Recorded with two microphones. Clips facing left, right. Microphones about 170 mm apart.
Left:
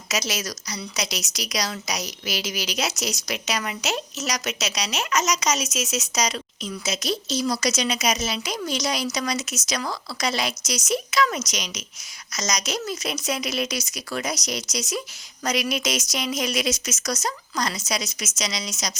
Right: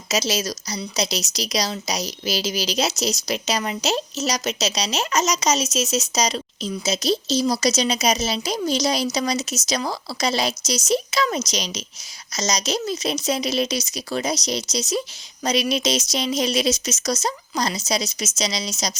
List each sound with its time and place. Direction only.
0.1 s a woman's voice: 30° right (ahead or behind)